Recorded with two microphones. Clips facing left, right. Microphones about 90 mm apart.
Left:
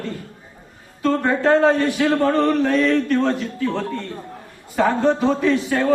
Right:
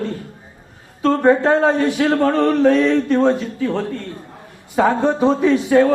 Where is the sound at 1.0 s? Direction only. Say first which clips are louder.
Right 4 dB; 25° right (ahead or behind).